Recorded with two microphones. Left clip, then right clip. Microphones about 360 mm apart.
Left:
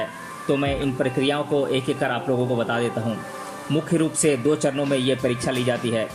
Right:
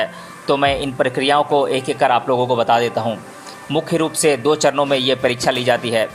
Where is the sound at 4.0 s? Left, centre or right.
Centre.